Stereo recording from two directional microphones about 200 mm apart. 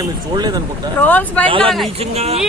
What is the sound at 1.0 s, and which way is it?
Speech, 10° left (ahead or behind).